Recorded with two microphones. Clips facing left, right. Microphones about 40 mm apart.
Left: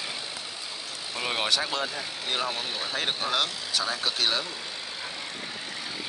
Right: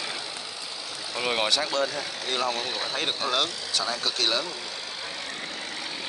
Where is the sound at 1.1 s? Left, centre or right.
Centre.